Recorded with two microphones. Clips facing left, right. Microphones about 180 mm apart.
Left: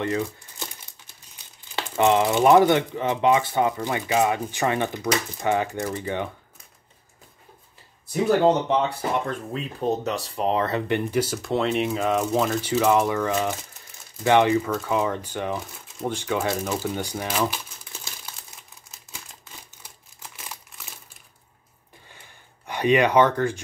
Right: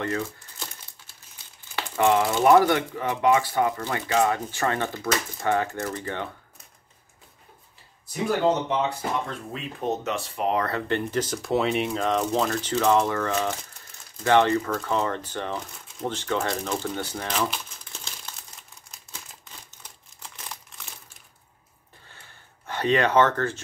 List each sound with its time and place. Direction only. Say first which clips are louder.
0.0 s speech: left 3 dB; 15° left (ahead or behind)
9.5 s speech: left 3 dB; 35° left (ahead or behind); by 18.3 s 10° left (ahead or behind)
18.9 s typewriter: left 1 dB; 10° left (ahead or behind)
22.7 s speech: left 3 dB; 15° left (ahead or behind)